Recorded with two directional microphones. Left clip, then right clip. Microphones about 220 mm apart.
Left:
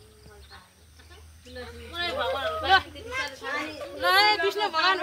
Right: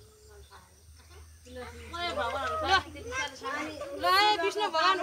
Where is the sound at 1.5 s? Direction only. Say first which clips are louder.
Left 4 dB; 40° right (ahead or behind).